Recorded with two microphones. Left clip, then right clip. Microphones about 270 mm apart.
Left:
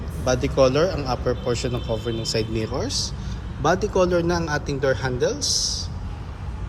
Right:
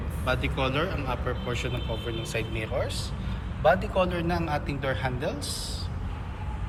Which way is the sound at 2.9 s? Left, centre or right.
Centre.